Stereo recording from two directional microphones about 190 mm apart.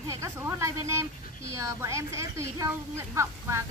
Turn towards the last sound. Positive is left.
turn(degrees=-15)  # may be behind; listen again after turning